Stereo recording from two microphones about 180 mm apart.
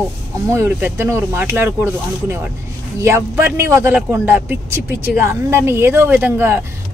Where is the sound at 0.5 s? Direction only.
10° right (ahead or behind).